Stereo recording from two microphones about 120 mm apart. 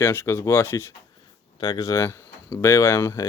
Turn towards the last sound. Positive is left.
turn(degrees=25)  # may be behind; listen again after turning